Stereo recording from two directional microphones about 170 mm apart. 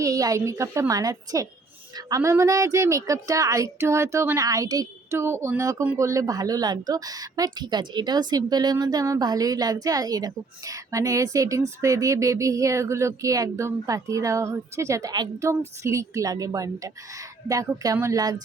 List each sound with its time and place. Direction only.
0.0 s speech: 20° right (ahead or behind)